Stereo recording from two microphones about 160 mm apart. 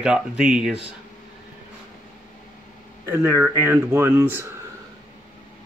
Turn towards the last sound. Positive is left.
turn(degrees=-15)  # may be behind; listen again after turning